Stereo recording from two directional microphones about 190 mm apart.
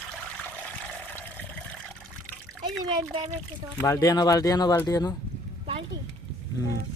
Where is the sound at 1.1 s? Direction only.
10° left (ahead or behind).